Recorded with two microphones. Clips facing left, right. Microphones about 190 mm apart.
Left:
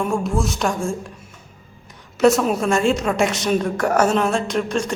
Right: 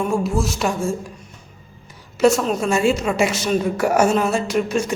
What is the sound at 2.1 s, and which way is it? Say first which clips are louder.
A woman's voice: left 1 dB; centre (ahead or behind).